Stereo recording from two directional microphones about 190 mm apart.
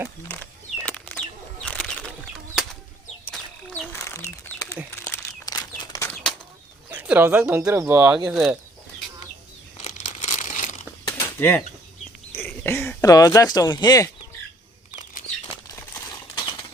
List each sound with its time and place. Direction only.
0.8 s bird flight: 10° left (ahead or behind)
1.6 s bird: 5° left (ahead or behind)
3.3 s bird: 5° left (ahead or behind)
3.9 s a sound: 15° left (ahead or behind)
6.9 s speech: 10° right (ahead or behind)
9.7 s crumpling: 40° left (ahead or behind)
11.2 s bird flight: 10° left (ahead or behind)
12.3 s speech: 10° left (ahead or behind)
14.9 s a sound: 40° left (ahead or behind)
16.3 s typewriter: 20° left (ahead or behind)